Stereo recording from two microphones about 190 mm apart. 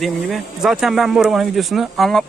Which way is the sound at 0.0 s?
Centre (ahead or behind).